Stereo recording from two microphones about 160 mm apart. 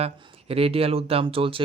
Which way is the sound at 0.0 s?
35° right (ahead or behind).